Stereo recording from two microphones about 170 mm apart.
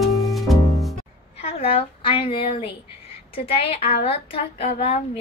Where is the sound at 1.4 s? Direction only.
35° left (ahead or behind).